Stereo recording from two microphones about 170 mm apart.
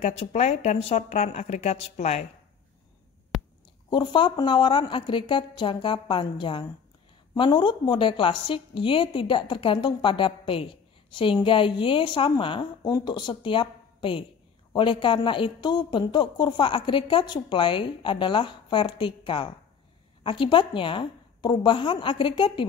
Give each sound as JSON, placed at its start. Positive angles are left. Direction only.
{"t": 0.0, "sound": "a woman's voice", "side_deg": 40}
{"t": 3.3, "sound": "a sound", "side_deg": 0}
{"t": 3.9, "sound": "a woman's voice", "side_deg": 25}